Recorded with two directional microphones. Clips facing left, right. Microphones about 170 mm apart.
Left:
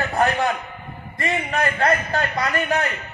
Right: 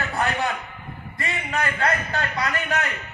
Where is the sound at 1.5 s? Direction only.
40° left (ahead or behind).